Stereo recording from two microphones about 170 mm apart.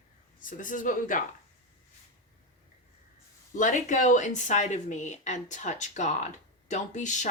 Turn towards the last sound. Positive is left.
turn(degrees=45)  # may be behind; listen again after turning